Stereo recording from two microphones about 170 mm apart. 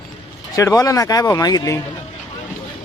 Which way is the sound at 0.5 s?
20° left (ahead or behind).